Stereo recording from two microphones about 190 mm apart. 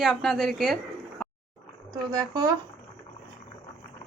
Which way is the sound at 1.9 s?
20° right (ahead or behind).